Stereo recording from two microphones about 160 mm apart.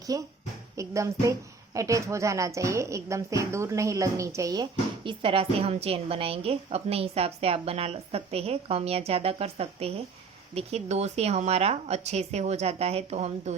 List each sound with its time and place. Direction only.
0.1 s a woman's voice: 20° right (ahead or behind); by 13.6 s 45° right (ahead or behind)